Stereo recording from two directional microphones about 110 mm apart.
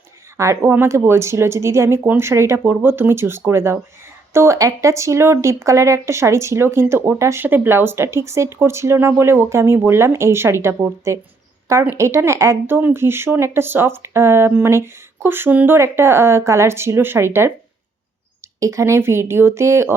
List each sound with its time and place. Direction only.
0.3 s speech: 25° right (ahead or behind)
18.6 s speech: 25° right (ahead or behind)